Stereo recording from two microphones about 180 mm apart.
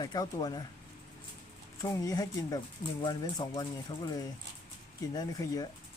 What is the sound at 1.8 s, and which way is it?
Speech, 20° left (ahead or behind).